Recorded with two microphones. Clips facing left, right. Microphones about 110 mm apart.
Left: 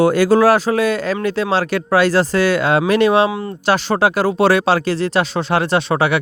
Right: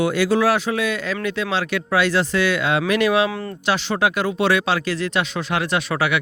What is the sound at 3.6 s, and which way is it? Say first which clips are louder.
Speech: left 5 dB; 45° left (ahead or behind).